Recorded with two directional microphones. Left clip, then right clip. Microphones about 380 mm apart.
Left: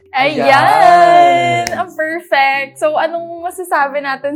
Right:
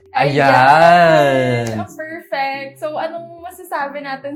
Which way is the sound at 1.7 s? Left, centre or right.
Left.